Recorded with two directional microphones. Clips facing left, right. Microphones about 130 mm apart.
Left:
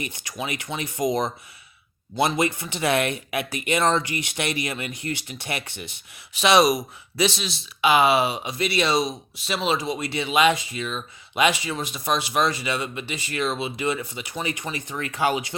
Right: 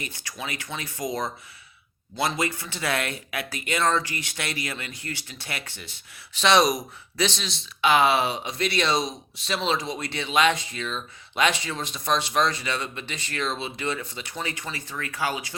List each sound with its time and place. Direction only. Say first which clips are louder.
0.0 s speech: left 4 dB; 20° left (ahead or behind)